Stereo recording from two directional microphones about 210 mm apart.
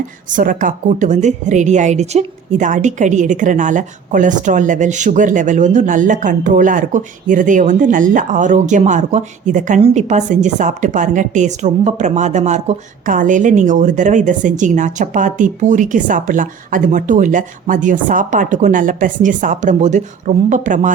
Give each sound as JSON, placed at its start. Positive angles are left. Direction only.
{"t": 0.3, "sound": "a woman's voice", "side_deg": -40}